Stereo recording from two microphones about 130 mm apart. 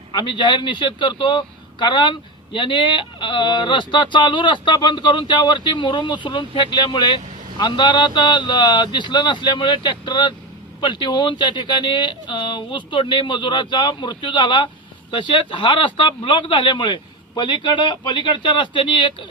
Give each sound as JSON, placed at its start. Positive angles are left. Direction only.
{"t": 0.1, "sound": "a man's voice", "side_deg": 35}